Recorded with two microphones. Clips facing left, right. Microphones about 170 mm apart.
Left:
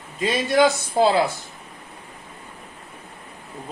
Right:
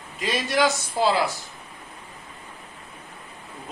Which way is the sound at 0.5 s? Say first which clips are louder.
Left 5 dB; 25° left (ahead or behind).